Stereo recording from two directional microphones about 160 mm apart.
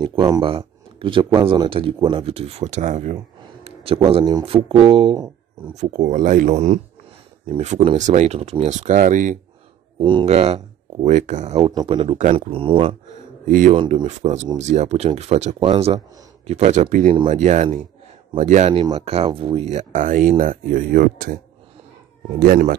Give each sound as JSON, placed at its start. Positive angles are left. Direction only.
{"t": 0.0, "sound": "speech", "side_deg": -30}
{"t": 3.6, "sound": "a sound", "side_deg": -35}
{"t": 4.1, "sound": "speech", "side_deg": -25}
{"t": 5.8, "sound": "speech", "side_deg": -50}
{"t": 9.9, "sound": "speech", "side_deg": -30}
{"t": 11.7, "sound": "speech", "side_deg": -30}
{"t": 13.5, "sound": "a man's voice", "side_deg": -55}